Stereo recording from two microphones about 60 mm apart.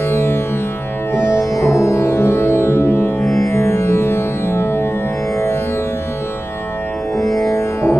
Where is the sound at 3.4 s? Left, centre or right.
Left.